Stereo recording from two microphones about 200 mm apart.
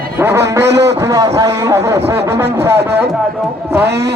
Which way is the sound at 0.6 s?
60° right (ahead or behind).